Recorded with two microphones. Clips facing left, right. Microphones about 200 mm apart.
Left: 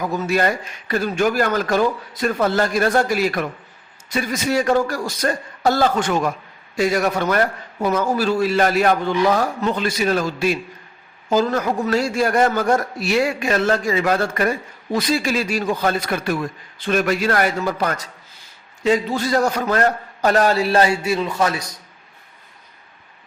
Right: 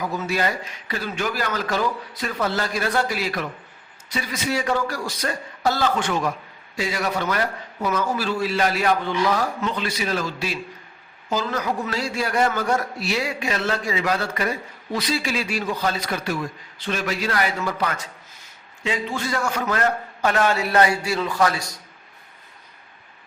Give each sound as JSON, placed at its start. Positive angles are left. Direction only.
{"t": 0.3, "sound": "a man's voice", "side_deg": 50}